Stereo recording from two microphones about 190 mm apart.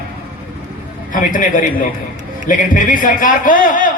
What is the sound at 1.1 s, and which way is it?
A man's voice, 45° left (ahead or behind).